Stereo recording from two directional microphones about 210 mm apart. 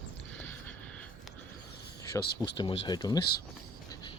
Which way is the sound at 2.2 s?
50° left (ahead or behind).